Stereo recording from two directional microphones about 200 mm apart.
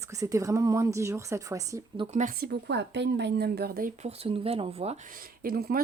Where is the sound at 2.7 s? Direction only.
60° right (ahead or behind).